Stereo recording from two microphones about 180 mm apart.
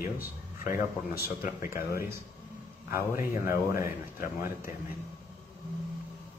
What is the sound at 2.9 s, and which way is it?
Speech, 15° right (ahead or behind).